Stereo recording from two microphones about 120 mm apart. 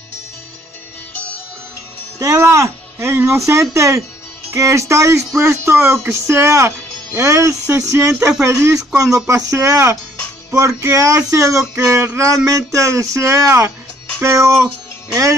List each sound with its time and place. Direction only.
2.1 s speech: 25° right (ahead or behind)